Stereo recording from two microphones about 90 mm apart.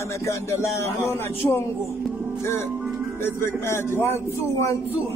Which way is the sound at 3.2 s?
30° left (ahead or behind).